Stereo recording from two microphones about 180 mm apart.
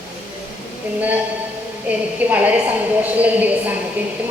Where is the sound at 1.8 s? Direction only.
10° right (ahead or behind).